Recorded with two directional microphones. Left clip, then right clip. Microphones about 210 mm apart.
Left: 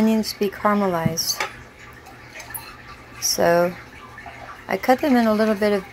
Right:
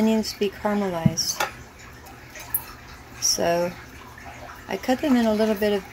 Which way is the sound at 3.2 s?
15° left (ahead or behind).